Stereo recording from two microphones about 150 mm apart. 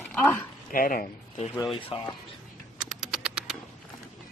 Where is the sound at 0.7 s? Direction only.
70° left (ahead or behind).